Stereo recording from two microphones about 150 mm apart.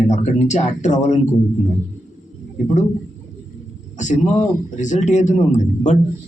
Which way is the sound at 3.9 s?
55° left (ahead or behind).